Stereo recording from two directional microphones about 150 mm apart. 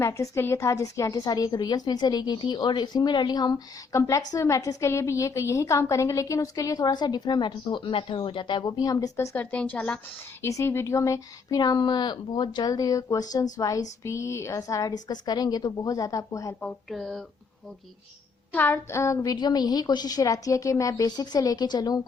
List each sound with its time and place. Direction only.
0.0 s a woman's voice: 20° left (ahead or behind)
16.6 s a sound: 5° left (ahead or behind)
18.5 s a woman's voice: 15° left (ahead or behind)